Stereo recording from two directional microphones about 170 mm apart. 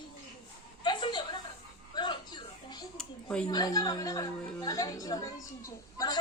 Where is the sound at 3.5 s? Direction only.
20° left (ahead or behind).